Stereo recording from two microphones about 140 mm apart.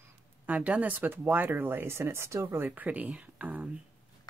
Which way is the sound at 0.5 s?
10° right (ahead or behind).